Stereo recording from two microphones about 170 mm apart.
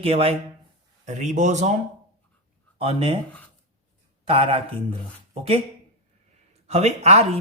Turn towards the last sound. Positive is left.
turn(degrees=-40)  # may be behind; listen again after turning